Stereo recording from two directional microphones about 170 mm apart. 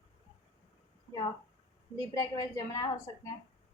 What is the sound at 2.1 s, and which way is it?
A woman's voice, 20° left (ahead or behind).